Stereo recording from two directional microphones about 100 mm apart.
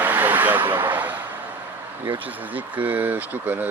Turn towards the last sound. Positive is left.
turn(degrees=-20)  # may be behind; listen again after turning